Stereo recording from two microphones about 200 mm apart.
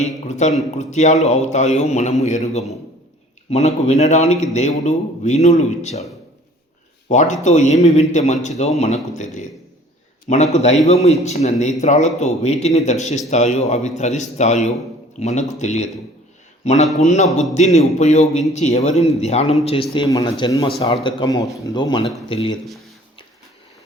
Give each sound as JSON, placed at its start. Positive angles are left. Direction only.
{"t": 0.0, "sound": "a man's voice", "side_deg": 35}
{"t": 7.1, "sound": "a man's voice", "side_deg": 35}
{"t": 16.8, "sound": "a man's voice", "side_deg": 0}
{"t": 17.5, "sound": "a man's voice", "side_deg": 35}